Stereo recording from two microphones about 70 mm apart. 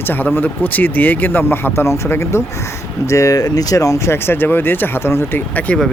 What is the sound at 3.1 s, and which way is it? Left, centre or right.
Speech, left.